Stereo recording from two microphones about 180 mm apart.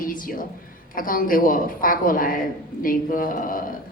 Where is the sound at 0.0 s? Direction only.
50° left (ahead or behind).